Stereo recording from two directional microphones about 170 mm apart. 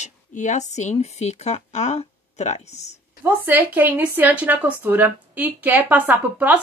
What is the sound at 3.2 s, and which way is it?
Speech, 10° right (ahead or behind).